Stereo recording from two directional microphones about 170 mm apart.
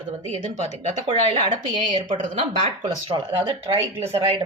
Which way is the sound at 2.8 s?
25° right (ahead or behind).